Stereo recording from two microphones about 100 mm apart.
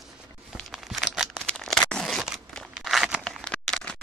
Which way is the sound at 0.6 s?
Centre (ahead or behind).